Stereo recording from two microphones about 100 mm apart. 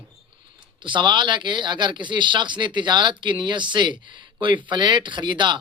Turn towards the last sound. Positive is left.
turn(degrees=-50)  # may be behind; listen again after turning